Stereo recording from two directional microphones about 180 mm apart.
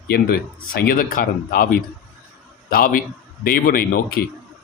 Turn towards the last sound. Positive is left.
turn(degrees=60)  # may be behind; listen again after turning